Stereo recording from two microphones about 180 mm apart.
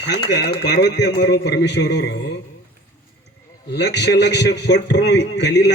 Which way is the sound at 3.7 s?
70° left (ahead or behind).